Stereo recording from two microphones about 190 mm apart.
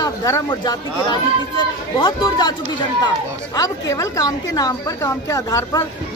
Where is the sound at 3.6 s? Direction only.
20° left (ahead or behind).